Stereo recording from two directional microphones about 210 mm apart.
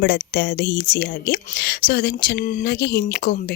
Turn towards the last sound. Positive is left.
turn(degrees=45)  # may be behind; listen again after turning